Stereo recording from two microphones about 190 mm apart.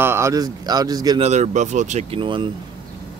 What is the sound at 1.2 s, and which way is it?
Speech, 35° right (ahead or behind).